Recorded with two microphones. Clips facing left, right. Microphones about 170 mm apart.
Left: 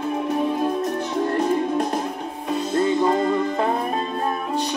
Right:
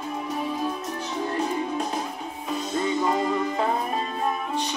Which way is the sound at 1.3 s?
Centre (ahead or behind).